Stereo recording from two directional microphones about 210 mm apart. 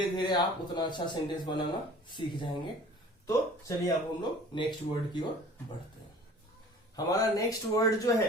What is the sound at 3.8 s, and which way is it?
Speech, 20° left (ahead or behind).